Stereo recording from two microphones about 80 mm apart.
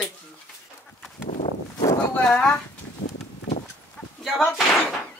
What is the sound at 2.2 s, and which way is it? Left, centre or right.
Speech, centre.